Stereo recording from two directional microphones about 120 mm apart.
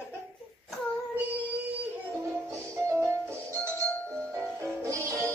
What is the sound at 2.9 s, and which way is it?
Music, 20° right (ahead or behind).